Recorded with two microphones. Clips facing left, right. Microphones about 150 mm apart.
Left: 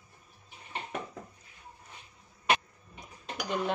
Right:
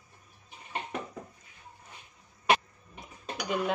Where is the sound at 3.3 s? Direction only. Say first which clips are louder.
Right 1 dB; 5° right (ahead or behind).